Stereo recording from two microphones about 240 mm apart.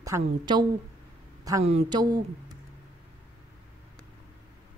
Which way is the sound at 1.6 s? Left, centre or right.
Right.